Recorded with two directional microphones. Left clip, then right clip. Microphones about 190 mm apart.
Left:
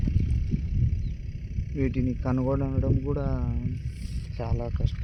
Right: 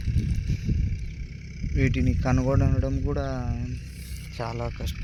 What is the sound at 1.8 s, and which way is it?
Speech, 15° left (ahead or behind).